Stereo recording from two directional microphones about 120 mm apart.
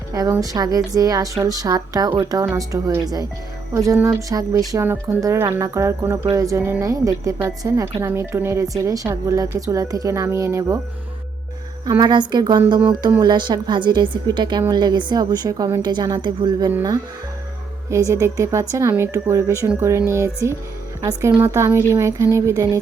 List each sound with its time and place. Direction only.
0.1 s a woman's voice: 25° right (ahead or behind)
11.9 s a woman's voice: 35° right (ahead or behind)
17.9 s speech: 25° right (ahead or behind)